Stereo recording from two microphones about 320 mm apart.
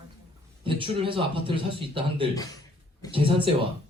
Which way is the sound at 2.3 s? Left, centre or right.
Centre.